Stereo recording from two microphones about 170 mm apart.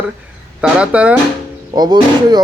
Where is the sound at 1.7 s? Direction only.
25° right (ahead or behind).